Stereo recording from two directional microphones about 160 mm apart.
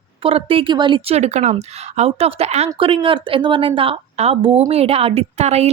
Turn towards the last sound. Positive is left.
turn(degrees=-45)  # may be behind; listen again after turning